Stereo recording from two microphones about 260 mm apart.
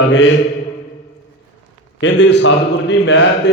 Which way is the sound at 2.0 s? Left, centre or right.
Left.